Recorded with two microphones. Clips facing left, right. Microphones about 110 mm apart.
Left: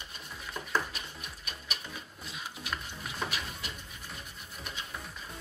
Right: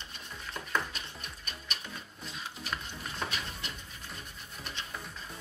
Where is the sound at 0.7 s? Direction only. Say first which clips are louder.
Left 1 dB; 5° left (ahead or behind).